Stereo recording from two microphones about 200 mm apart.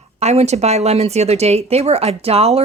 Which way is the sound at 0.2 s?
35° right (ahead or behind).